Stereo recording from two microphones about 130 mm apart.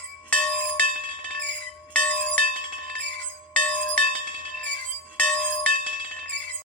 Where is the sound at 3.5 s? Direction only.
10° left (ahead or behind).